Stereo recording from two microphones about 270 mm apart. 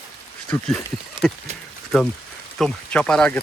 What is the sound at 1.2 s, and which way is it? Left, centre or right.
Speech, centre.